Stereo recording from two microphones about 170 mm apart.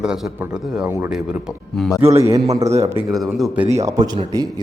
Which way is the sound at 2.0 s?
35° right (ahead or behind).